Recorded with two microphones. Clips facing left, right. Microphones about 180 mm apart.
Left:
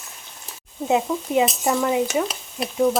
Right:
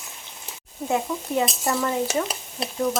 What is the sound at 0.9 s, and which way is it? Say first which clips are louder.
Frying: left 4 dB; 15° left (ahead or behind).